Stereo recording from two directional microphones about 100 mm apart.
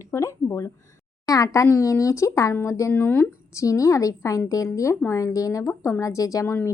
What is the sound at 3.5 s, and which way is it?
Speech, 30° left (ahead or behind).